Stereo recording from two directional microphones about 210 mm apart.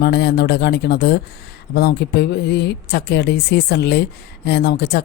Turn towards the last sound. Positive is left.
turn(degrees=50)  # may be behind; listen again after turning